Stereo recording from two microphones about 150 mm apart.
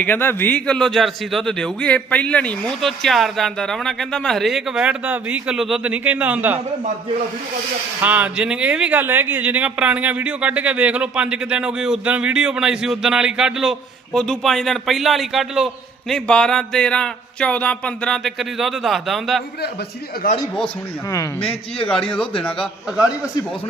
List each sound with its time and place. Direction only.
0.0 s speech: 15° left (ahead or behind); by 6.6 s 10° right (ahead or behind)
8.0 s speech: 10° right (ahead or behind)
20.2 s speech: 75° left (ahead or behind)
22.0 s speech: 35° left (ahead or behind)